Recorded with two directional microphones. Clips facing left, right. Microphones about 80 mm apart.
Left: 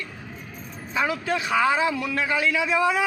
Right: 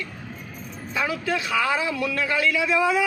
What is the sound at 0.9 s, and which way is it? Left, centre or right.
A man's voice, left.